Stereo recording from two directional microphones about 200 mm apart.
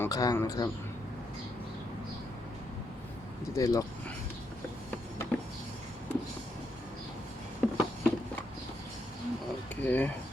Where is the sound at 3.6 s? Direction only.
15° left (ahead or behind).